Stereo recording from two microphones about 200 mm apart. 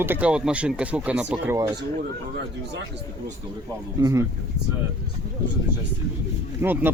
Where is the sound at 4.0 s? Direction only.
15° right (ahead or behind).